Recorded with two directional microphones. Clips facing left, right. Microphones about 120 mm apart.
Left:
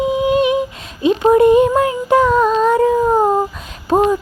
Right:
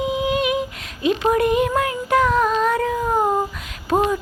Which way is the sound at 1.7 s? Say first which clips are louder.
Left 6 dB; 25° left (ahead or behind).